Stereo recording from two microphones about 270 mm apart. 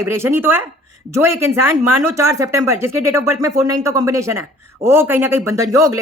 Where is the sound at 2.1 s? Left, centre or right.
Centre.